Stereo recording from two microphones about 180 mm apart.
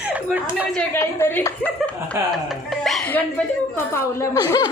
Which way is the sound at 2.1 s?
15° right (ahead or behind).